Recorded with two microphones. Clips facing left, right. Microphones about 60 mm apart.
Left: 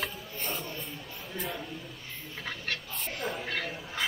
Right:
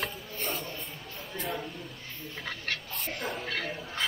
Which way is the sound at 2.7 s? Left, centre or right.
Centre.